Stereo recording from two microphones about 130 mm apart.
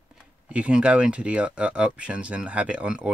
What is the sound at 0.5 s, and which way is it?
Speech, 10° right (ahead or behind).